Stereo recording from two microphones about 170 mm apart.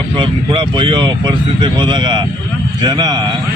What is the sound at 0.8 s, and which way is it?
Speech, 30° right (ahead or behind).